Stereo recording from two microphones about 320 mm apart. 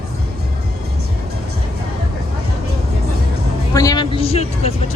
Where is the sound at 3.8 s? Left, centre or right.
Centre.